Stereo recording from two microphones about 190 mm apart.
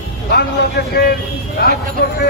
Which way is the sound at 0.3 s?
60° left (ahead or behind).